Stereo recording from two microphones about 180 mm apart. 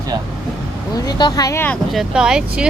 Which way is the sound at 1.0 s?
25° left (ahead or behind).